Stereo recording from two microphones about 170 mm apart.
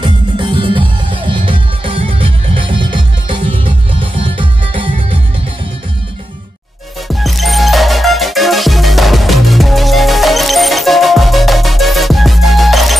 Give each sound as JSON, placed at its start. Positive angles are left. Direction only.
{"t": 0.0, "sound": "music", "side_deg": -30}
{"t": 7.1, "sound": "music", "side_deg": 0}